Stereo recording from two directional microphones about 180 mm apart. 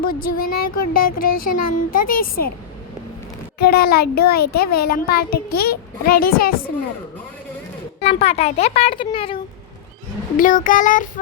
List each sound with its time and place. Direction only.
0.0 s speech: 55° left (ahead or behind)
3.6 s a child's voice: 60° left (ahead or behind)
8.0 s speech: 35° left (ahead or behind)
10.3 s speech: 50° left (ahead or behind)